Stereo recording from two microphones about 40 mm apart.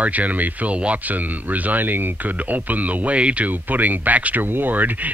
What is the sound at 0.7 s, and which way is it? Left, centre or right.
Speech, right.